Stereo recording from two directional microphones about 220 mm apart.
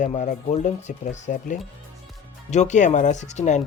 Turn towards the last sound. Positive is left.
turn(degrees=30)  # may be behind; listen again after turning